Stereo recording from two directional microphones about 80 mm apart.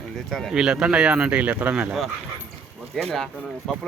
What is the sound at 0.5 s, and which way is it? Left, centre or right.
Speech, centre.